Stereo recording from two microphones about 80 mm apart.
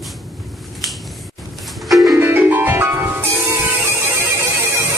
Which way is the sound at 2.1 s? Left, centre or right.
Right.